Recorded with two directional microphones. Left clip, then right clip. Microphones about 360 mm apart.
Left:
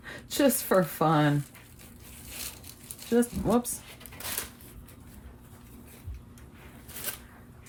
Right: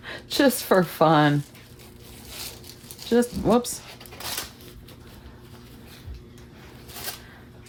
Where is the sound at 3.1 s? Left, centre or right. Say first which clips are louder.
Right 5 dB; right.